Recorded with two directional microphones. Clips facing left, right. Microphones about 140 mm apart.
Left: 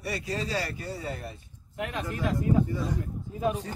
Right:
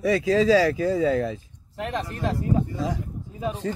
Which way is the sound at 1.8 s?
35° right (ahead or behind).